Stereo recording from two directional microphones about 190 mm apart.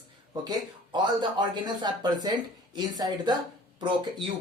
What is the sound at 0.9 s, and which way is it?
Speech, 25° right (ahead or behind).